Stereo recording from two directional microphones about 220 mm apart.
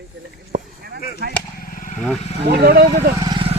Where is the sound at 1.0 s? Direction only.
45° left (ahead or behind).